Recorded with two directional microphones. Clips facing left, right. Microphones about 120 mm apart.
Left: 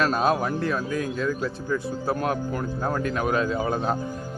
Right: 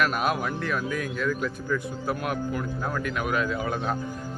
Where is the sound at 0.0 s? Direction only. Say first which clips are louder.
Left 3 dB; 30° left (ahead or behind).